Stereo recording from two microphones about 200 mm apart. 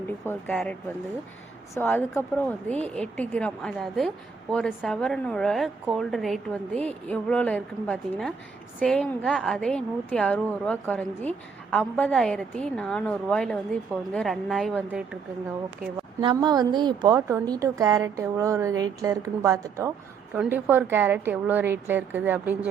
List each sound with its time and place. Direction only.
0.3 s a woman's voice: 5° left (ahead or behind)
16.2 s a woman's voice: 20° right (ahead or behind)